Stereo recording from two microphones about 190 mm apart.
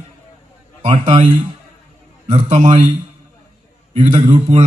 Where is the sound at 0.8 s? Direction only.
35° right (ahead or behind).